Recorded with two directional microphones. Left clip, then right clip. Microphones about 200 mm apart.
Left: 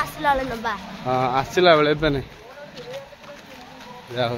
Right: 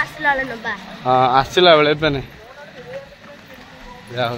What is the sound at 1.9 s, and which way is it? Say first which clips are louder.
Speech: right 3 dB; 5° right (ahead or behind).